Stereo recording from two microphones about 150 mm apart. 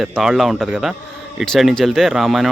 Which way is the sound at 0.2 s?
Centre (ahead or behind).